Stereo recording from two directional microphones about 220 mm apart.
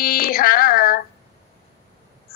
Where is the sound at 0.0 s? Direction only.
40° left (ahead or behind).